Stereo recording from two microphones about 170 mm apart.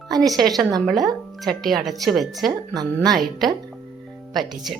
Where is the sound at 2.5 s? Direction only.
25° right (ahead or behind).